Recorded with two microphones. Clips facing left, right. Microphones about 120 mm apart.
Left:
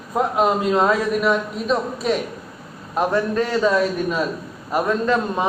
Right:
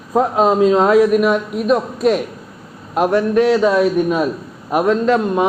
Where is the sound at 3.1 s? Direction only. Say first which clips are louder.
Right 9 dB; 80° right.